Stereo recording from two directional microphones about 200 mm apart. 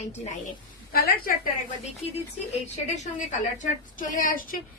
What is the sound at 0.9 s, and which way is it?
Speech, 50° left (ahead or behind).